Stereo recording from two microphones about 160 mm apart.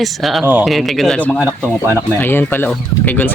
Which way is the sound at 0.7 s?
Centre (ahead or behind).